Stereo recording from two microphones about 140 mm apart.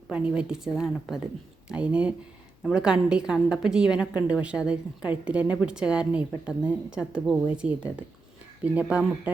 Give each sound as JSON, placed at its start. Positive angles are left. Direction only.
{"t": 0.1, "sound": "a woman's voice", "side_deg": -10}